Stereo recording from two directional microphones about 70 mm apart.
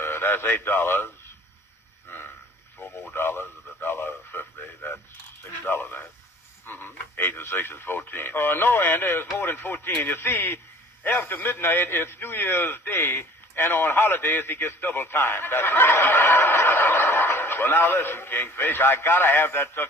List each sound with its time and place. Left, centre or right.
0.0 s speech: left
2.0 s a sound: left
2.7 s radio: left
5.4 s a man's voice: left